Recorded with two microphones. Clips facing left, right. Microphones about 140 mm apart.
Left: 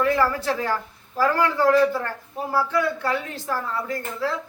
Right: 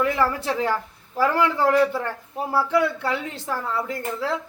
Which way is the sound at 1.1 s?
25° right (ahead or behind).